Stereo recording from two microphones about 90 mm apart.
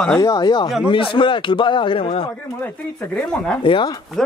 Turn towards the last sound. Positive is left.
turn(degrees=65)  # may be behind; listen again after turning